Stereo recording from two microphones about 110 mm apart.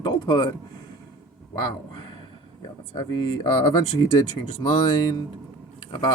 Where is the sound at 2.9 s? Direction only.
45° left (ahead or behind).